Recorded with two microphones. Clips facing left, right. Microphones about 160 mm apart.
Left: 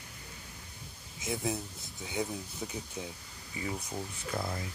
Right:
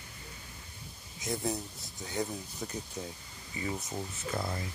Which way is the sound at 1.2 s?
Centre (ahead or behind).